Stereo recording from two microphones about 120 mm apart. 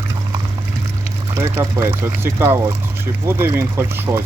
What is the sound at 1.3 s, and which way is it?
Speech, 25° right (ahead or behind).